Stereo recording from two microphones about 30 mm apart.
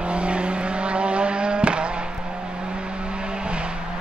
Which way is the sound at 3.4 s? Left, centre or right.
Right.